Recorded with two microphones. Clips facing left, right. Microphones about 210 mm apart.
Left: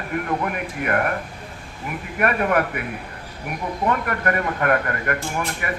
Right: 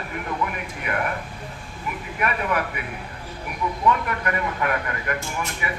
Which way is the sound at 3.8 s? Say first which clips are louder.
Left 1 dB; 55° left (ahead or behind).